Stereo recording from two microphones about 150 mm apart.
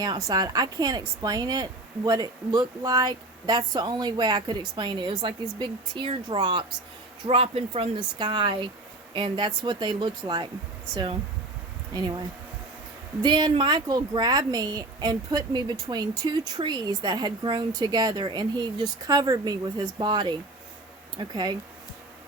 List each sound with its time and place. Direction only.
0.0 s a woman's voice: 25° right (ahead or behind)
11.9 s a woman's voice: 30° right (ahead or behind)
13.2 s a woman's voice: 30° right (ahead or behind)